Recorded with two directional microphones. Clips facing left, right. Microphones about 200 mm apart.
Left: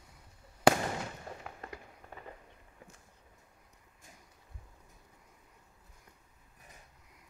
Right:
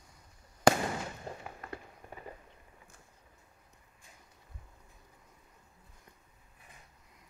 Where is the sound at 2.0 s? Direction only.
15° right (ahead or behind).